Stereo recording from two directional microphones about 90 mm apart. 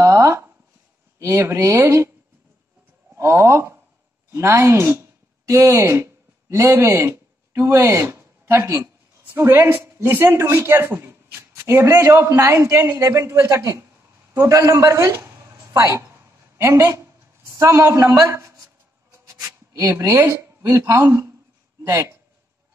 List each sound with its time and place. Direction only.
0.0 s a sound: 35° right (ahead or behind)
1.2 s a woman's voice: 30° right (ahead or behind)
3.2 s a woman's voice: 30° right (ahead or behind)
19.1 s rub: 35° right (ahead or behind)
20.6 s a woman's voice: 30° right (ahead or behind)